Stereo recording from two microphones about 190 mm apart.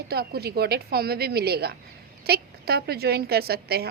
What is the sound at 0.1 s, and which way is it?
A woman's voice, 55° right (ahead or behind).